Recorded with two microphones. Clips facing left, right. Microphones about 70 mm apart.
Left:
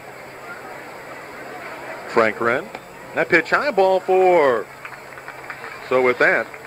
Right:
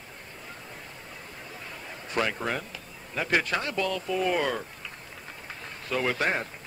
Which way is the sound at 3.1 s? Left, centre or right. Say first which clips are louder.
Left 10 dB; left.